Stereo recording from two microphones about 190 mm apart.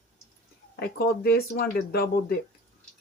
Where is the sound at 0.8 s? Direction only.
55° left (ahead or behind).